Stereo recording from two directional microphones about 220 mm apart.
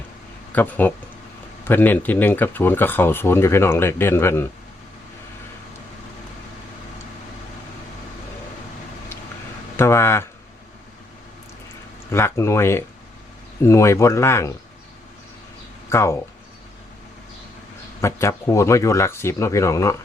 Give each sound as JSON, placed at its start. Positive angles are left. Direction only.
{"t": 0.5, "sound": "speech", "side_deg": 10}
{"t": 9.7, "sound": "speech", "side_deg": 10}
{"t": 12.1, "sound": "speech", "side_deg": 10}
{"t": 15.9, "sound": "speech", "side_deg": 10}
{"t": 18.0, "sound": "speech", "side_deg": 10}